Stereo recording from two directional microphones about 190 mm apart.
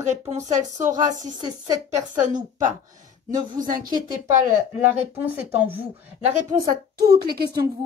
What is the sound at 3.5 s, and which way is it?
Speech, 45° right (ahead or behind).